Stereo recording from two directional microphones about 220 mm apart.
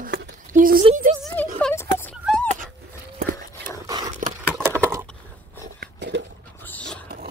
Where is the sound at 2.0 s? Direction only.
5° left (ahead or behind).